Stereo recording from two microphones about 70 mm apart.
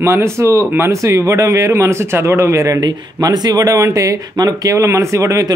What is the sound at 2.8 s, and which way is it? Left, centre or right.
A man's voice, right.